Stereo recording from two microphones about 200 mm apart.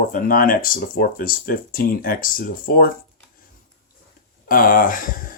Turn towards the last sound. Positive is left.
turn(degrees=45)  # may be behind; listen again after turning